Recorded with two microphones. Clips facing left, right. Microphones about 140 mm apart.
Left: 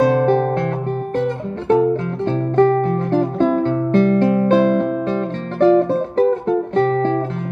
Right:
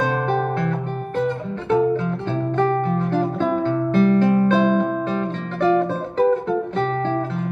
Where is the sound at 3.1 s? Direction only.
35° left (ahead or behind).